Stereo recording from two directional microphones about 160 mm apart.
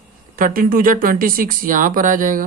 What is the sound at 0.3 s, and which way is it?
Speech, 60° right (ahead or behind).